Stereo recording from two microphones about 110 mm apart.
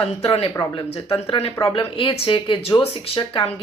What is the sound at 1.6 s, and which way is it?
A woman's voice, 55° left (ahead or behind).